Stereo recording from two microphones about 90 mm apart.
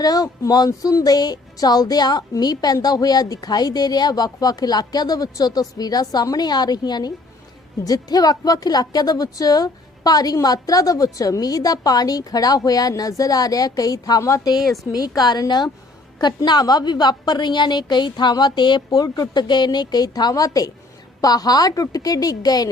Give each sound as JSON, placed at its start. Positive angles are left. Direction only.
{"t": 0.0, "sound": "music", "side_deg": 45}
{"t": 14.9, "sound": "music", "side_deg": 45}